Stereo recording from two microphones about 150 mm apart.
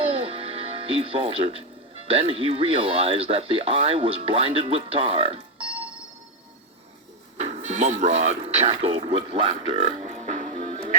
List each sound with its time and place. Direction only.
0.0 s speech: 40° right (ahead or behind)
7.3 s speech: 50° right (ahead or behind)